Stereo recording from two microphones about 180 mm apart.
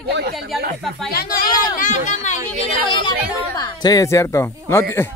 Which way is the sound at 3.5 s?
20° left (ahead or behind).